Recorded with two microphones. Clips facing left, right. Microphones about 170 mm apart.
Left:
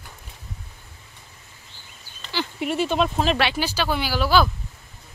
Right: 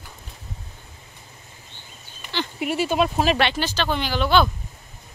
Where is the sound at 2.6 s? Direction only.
5° right (ahead or behind).